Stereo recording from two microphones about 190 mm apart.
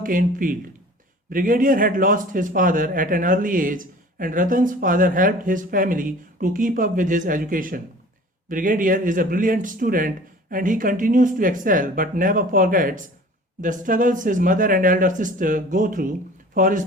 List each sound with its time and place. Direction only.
0.0 s a man's voice: 45° right (ahead or behind)